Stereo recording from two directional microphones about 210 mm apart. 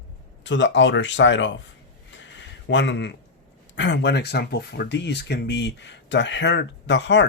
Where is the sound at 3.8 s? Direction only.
55° left (ahead or behind).